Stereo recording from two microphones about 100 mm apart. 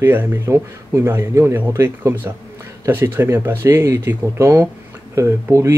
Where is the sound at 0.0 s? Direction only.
20° right (ahead or behind).